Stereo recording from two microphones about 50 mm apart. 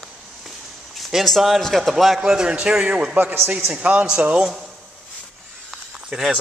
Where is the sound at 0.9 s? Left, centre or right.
Centre.